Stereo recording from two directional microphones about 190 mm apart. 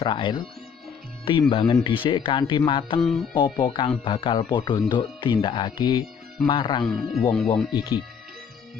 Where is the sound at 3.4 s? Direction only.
25° left (ahead or behind).